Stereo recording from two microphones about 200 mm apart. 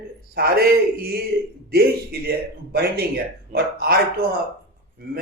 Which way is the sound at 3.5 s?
50° right (ahead or behind).